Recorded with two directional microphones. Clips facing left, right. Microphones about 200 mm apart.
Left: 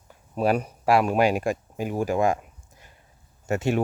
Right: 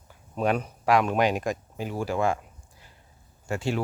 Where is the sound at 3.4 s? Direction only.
20° left (ahead or behind).